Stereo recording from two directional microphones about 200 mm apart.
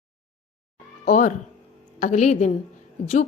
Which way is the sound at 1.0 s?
40° left (ahead or behind).